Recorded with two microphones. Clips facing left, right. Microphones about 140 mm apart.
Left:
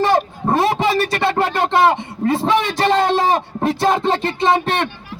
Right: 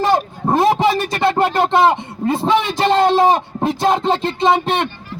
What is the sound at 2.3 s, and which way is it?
A man's voice, 20° right (ahead or behind).